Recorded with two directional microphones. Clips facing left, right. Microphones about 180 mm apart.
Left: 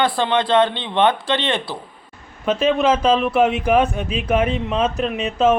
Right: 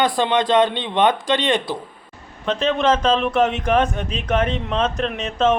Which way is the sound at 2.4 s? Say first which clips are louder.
Left 2 dB; 10° left (ahead or behind).